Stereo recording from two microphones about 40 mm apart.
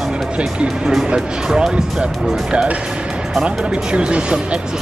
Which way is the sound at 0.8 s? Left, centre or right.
Centre.